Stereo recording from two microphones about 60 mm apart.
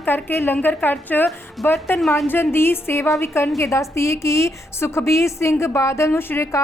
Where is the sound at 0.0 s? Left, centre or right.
Left.